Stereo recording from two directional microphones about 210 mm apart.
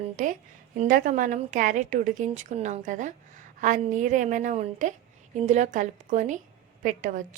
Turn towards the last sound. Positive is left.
turn(degrees=-40)  # may be behind; listen again after turning